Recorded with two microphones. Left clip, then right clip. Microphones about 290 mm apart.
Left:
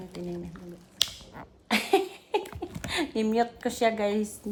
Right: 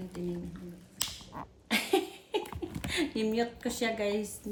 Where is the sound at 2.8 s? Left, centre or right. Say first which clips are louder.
Left 3 dB; left.